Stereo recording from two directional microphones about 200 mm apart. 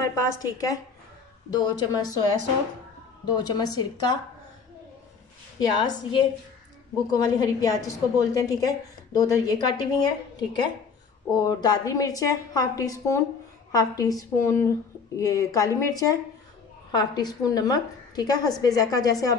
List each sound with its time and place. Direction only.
0.0 s a woman's voice: 15° left (ahead or behind)
3.3 s a woman's voice: 20° left (ahead or behind)
5.8 s a woman's voice: 20° left (ahead or behind)